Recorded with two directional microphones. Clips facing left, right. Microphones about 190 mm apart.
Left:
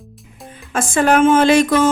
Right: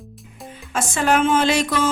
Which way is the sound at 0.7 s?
55° left (ahead or behind).